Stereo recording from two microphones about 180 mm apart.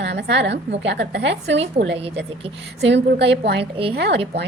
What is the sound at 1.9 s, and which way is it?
Speech, 35° right (ahead or behind).